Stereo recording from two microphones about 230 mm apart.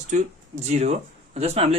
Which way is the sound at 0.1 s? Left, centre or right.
Right.